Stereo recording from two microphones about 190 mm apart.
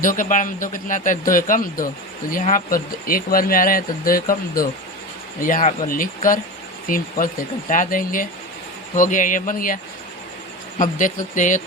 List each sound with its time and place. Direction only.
0.0 s speech: 45° left (ahead or behind)
10.8 s speech: 45° left (ahead or behind)